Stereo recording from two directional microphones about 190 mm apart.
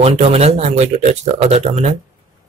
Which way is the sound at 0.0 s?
35° right (ahead or behind).